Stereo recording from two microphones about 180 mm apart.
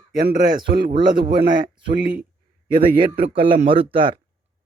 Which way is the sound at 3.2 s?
55° right (ahead or behind).